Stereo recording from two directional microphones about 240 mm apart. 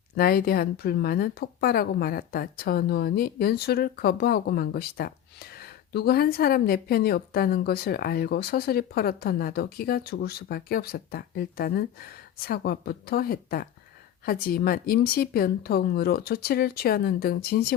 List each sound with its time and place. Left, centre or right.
0.2 s speech: left